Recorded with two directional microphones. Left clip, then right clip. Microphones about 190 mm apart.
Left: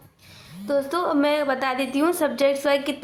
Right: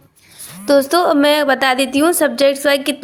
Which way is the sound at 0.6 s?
35° right (ahead or behind).